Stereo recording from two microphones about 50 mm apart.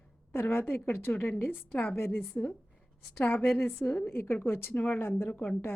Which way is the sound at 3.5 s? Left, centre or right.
Left.